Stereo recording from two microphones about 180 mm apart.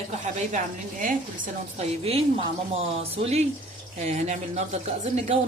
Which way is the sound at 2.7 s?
35° right (ahead or behind).